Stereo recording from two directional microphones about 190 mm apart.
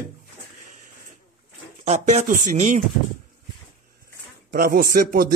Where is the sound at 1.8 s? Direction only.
35° right (ahead or behind).